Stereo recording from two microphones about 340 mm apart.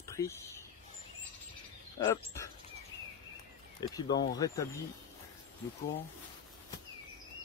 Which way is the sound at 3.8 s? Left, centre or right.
Centre.